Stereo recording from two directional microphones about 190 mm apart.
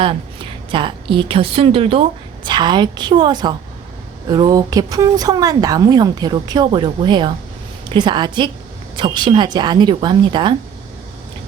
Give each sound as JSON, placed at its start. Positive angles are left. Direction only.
{"t": 0.7, "sound": "a woman's voice", "side_deg": -25}